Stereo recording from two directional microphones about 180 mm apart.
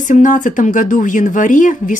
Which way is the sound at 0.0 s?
45° left (ahead or behind).